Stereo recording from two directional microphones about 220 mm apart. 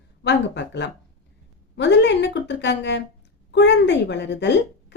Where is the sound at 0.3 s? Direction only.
50° left (ahead or behind).